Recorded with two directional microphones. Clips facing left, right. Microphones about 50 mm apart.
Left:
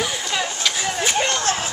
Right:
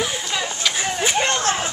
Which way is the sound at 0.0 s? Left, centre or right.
Centre.